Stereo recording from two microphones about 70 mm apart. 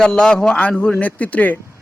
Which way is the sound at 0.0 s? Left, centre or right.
Centre.